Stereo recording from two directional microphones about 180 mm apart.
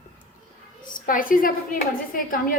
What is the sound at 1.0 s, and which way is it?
A woman's voice, 50° left (ahead or behind).